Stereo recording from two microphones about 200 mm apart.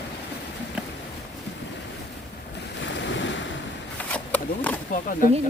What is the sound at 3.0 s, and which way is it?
Waves, 65° left (ahead or behind).